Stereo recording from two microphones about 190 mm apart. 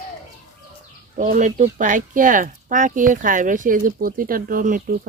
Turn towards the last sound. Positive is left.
turn(degrees=-45)  # may be behind; listen again after turning